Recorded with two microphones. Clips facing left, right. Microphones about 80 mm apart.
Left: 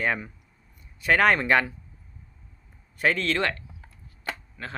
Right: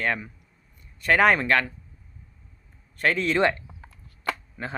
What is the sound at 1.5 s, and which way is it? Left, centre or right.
Speech, centre.